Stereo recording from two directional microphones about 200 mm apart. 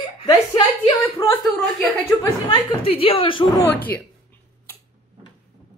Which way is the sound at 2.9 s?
30° left (ahead or behind).